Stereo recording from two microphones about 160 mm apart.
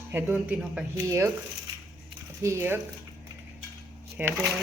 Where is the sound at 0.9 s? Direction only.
20° right (ahead or behind).